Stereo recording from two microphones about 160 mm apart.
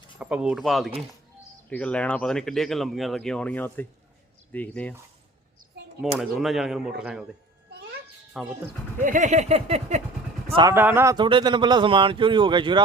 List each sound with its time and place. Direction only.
0.2 s speech: 5° right (ahead or behind)
6.1 s speech: centre (ahead or behind)
8.3 s speech: 5° right (ahead or behind)
9.0 s speech: 55° right (ahead or behind)
10.5 s speech: 30° right (ahead or behind)
10.8 s speech: 15° right (ahead or behind)
11.2 s speech: 30° right (ahead or behind)